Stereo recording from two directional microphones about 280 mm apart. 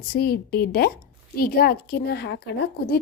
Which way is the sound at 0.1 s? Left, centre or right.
Left.